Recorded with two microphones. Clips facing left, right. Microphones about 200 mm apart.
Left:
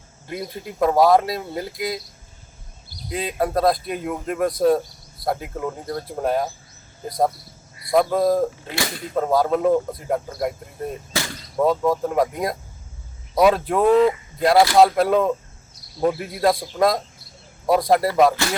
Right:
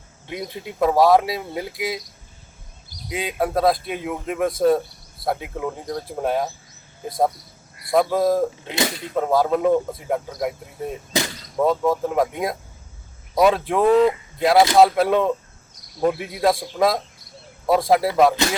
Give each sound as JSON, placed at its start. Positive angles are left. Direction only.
{"t": 0.3, "sound": "speech", "side_deg": 0}
{"t": 3.1, "sound": "speech", "side_deg": 0}
{"t": 11.1, "sound": "a sound", "side_deg": -20}
{"t": 11.5, "sound": "speech", "side_deg": 0}
{"t": 18.4, "sound": "music", "side_deg": -20}